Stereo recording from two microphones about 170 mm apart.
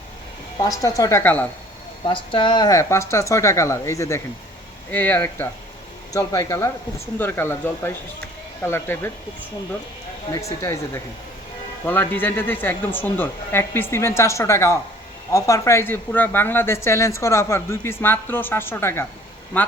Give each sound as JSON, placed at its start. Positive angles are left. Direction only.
{"t": 0.6, "sound": "a woman's voice", "side_deg": 20}
{"t": 2.0, "sound": "a man's voice", "side_deg": 30}
{"t": 10.3, "sound": "a man's voice", "side_deg": 20}